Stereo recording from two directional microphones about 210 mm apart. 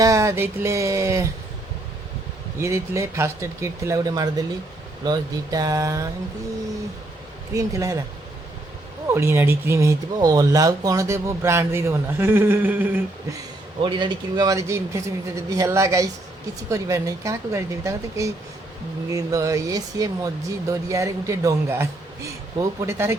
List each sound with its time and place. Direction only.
0.0 s speech: 15° right (ahead or behind)
2.6 s speech: 15° right (ahead or behind)
7.5 s speech: 15° right (ahead or behind)
9.0 s speech: 10° right (ahead or behind)
13.8 s speech: 20° right (ahead or behind)